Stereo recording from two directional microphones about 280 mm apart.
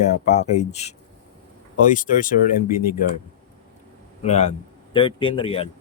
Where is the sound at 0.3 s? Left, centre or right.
Left.